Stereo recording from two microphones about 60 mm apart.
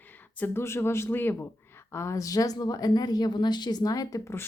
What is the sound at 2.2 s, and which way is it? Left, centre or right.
Speech, left.